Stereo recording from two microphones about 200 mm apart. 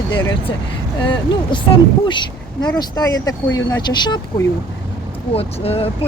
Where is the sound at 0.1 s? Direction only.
25° left (ahead or behind).